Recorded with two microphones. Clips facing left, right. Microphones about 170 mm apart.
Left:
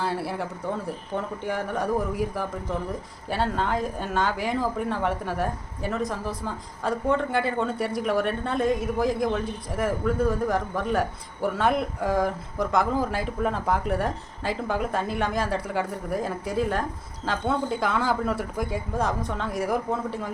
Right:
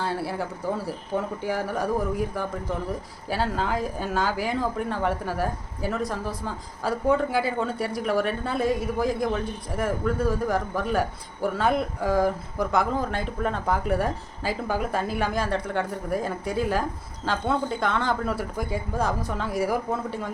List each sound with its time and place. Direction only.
0.0 s speech: centre (ahead or behind)